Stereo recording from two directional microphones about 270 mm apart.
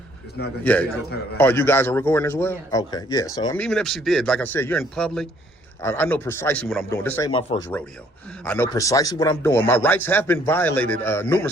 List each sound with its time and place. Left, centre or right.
0.6 s a man's voice: centre
7.3 s speech: centre
8.4 s a man's voice: centre